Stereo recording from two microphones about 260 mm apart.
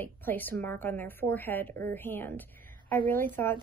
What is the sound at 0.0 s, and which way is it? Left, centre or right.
A woman's voice, centre.